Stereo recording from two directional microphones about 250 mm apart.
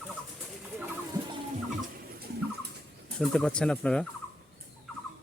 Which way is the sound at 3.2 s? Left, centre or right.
Centre.